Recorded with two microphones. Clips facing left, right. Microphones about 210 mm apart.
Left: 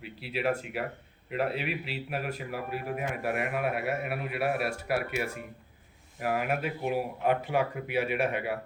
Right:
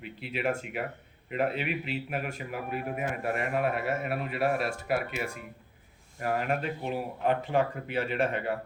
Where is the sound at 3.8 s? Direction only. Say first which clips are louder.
Even; 65° left (ahead or behind).